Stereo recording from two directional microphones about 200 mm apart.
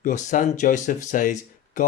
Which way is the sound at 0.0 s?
40° left (ahead or behind).